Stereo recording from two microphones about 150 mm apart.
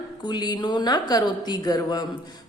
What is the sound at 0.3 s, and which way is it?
Speech, 30° left (ahead or behind).